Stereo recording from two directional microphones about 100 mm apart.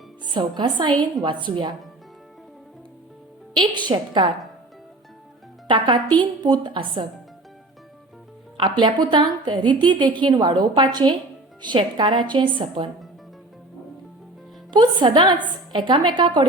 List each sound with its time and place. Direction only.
0.3 s a woman's voice: 50° right (ahead or behind)
3.5 s a woman's voice: 50° right (ahead or behind)
5.6 s a woman's voice: 50° right (ahead or behind)
8.8 s a woman's voice: 50° right (ahead or behind)
14.7 s a woman's voice: 50° right (ahead or behind)